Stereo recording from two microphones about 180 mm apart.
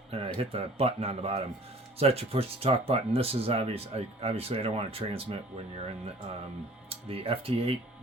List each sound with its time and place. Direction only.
0.1 s speech: 35° right (ahead or behind)
6.9 s speech: 30° right (ahead or behind)